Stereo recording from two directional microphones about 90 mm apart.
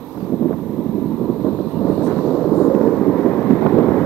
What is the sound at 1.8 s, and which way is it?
Vehicle, 5° left (ahead or behind).